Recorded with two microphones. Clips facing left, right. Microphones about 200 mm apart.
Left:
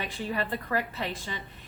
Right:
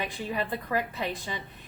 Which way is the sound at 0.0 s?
15° right (ahead or behind).